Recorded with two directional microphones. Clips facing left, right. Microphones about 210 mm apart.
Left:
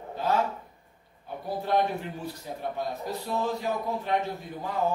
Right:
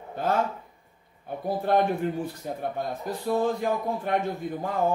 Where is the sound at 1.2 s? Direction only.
50° right (ahead or behind).